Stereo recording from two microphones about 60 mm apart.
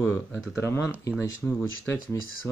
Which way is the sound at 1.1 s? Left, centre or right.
Centre.